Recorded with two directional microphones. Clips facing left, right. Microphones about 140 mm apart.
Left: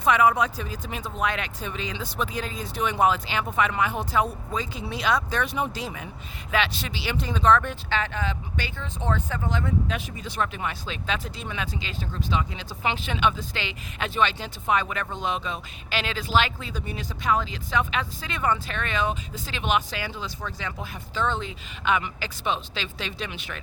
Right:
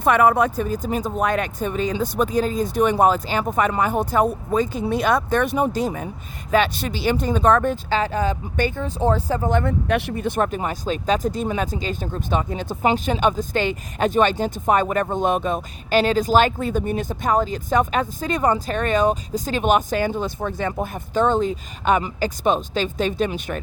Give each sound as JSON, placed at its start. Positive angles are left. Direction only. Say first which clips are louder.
{"t": 0.0, "sound": "speech", "louder": "right 4 dB", "side_deg": -55}
{"t": 9.5, "sound": "speech", "louder": "right 7 dB", "side_deg": -60}